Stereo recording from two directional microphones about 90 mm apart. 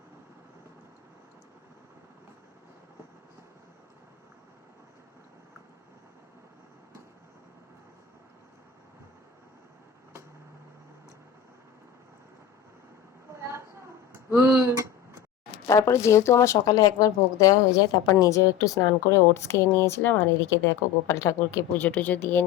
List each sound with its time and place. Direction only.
13.4 s a sound: 30° right (ahead or behind)
15.6 s speech: 35° left (ahead or behind)
21.8 s speech: 20° left (ahead or behind)